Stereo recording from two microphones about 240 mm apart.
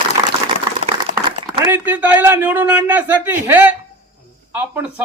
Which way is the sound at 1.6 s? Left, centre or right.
Centre.